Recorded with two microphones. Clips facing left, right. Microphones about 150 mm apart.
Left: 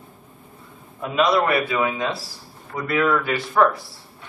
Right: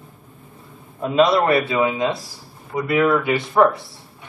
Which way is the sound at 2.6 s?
10° right (ahead or behind).